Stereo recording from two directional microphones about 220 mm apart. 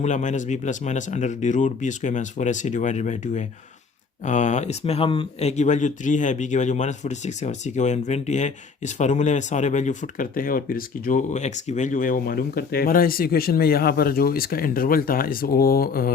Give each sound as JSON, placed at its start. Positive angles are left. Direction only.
{"t": 0.0, "sound": "speech", "side_deg": 35}